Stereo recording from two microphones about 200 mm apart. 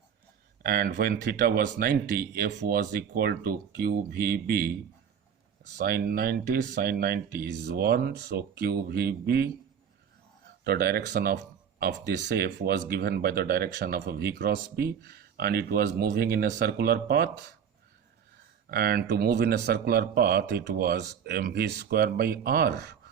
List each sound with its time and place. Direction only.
0.6 s speech: 45° right (ahead or behind)
5.7 s speech: 50° right (ahead or behind)
10.6 s speech: 50° right (ahead or behind)
18.7 s speech: 50° right (ahead or behind)